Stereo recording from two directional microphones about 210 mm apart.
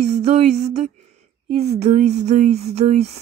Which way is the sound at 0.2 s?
30° right (ahead or behind).